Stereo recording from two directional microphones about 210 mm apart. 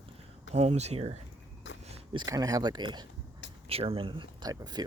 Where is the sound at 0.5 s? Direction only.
30° right (ahead or behind).